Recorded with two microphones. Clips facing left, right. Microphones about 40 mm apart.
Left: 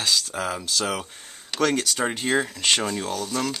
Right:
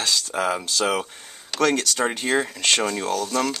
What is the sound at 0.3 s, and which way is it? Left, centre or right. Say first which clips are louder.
Speech: right 4 dB; centre.